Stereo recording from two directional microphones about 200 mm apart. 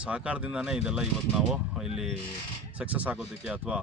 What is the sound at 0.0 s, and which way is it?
Speech, 5° right (ahead or behind).